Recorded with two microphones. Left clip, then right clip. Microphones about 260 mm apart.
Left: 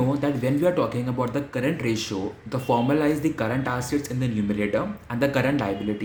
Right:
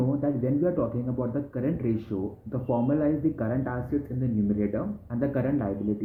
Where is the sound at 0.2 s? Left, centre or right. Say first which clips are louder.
Left 3 dB; centre.